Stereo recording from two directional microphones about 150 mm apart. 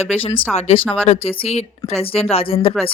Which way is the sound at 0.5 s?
40° left (ahead or behind).